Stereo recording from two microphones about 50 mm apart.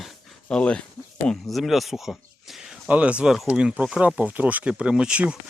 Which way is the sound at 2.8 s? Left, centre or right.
Right.